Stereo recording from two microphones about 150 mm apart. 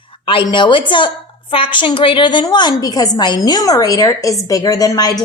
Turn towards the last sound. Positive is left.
turn(degrees=25)  # may be behind; listen again after turning